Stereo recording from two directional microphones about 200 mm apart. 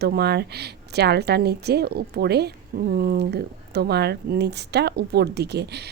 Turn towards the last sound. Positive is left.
turn(degrees=-55)  # may be behind; listen again after turning